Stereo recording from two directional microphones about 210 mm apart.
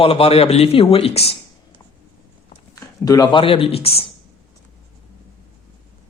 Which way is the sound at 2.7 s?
15° left (ahead or behind).